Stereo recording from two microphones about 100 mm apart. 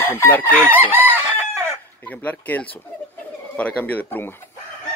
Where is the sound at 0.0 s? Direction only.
20° left (ahead or behind).